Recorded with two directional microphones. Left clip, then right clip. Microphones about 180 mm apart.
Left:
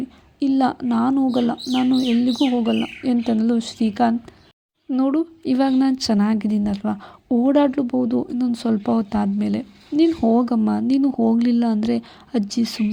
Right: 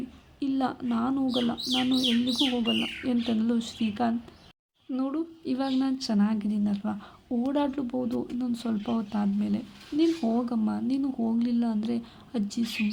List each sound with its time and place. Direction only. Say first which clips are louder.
0.3 s a woman's voice: left 10 dB; 35° left (ahead or behind)